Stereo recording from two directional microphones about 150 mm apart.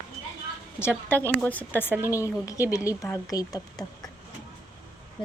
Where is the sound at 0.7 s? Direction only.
15° left (ahead or behind).